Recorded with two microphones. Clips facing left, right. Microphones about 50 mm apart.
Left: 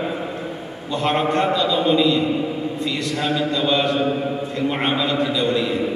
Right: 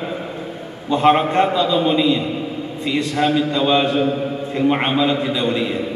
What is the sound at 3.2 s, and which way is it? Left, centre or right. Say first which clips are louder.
Speech: right 4 dB; centre.